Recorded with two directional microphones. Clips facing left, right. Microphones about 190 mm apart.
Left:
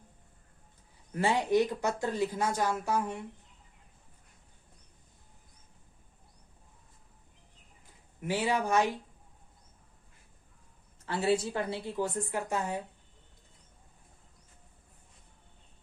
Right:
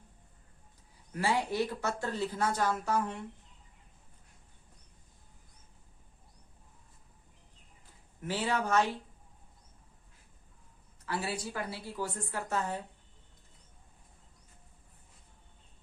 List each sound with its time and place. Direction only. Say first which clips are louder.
1.1 s speech: left 4 dB; 20° left (ahead or behind)
8.2 s speech: left 2 dB; 15° left (ahead or behind)
11.0 s a woman's voice: left 7 dB; 25° left (ahead or behind)